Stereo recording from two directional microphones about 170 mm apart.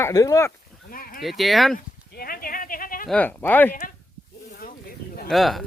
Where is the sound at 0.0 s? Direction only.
20° left (ahead or behind).